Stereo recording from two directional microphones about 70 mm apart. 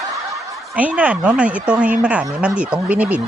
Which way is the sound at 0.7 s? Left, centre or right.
Right.